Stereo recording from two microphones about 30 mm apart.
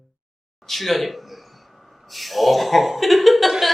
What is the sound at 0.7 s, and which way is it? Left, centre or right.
Speech, centre.